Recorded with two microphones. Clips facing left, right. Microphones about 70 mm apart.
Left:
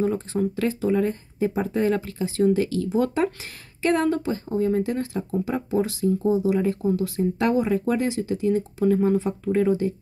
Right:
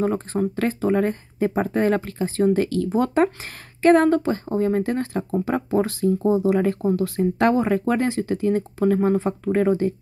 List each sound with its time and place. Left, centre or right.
0.0 s speech: right